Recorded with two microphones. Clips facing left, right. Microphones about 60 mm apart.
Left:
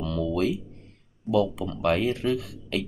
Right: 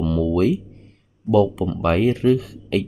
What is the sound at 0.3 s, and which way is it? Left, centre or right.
Music, right.